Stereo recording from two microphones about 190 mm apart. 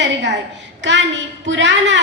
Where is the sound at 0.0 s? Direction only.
65° right (ahead or behind).